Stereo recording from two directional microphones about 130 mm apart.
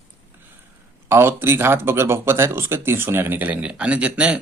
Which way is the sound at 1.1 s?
20° right (ahead or behind).